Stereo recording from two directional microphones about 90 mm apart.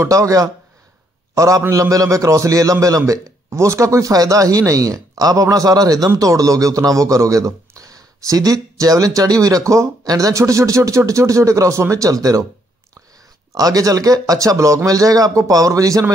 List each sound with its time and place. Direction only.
0.0 s a man's voice: 35° right (ahead or behind)
13.6 s a man's voice: 40° right (ahead or behind)